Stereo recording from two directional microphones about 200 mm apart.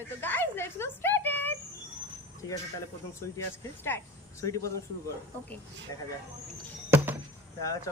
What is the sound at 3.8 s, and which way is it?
Speech, 15° left (ahead or behind).